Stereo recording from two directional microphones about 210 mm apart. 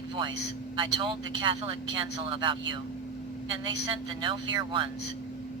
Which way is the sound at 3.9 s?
25° right (ahead or behind).